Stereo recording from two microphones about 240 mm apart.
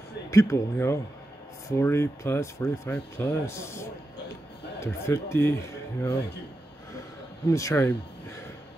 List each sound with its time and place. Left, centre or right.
0.3 s speech: centre
7.5 s speech: centre